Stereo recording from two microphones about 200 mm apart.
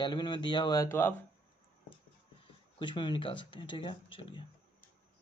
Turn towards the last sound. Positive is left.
turn(degrees=25)  # may be behind; listen again after turning